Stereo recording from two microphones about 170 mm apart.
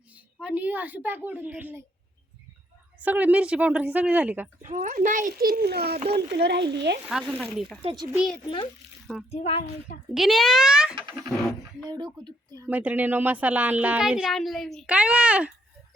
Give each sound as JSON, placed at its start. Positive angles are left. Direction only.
{"t": 0.3, "sound": "speech", "side_deg": -10}
{"t": 3.0, "sound": "speech", "side_deg": -10}
{"t": 4.6, "sound": "a child's voice", "side_deg": -45}
{"t": 6.3, "sound": "speech", "side_deg": -80}
{"t": 7.1, "sound": "speech", "side_deg": 0}
{"t": 8.4, "sound": "a child's voice", "side_deg": 30}
{"t": 10.2, "sound": "a child's voice", "side_deg": 0}
{"t": 11.9, "sound": "speech", "side_deg": -25}
{"t": 12.6, "sound": "speech", "side_deg": -10}